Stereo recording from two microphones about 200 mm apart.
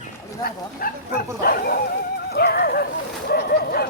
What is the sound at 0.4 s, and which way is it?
Speech, 45° left (ahead or behind).